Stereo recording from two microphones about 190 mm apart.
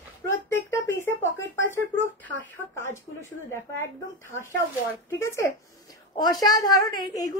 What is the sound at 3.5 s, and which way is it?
A woman's voice, 15° left (ahead or behind).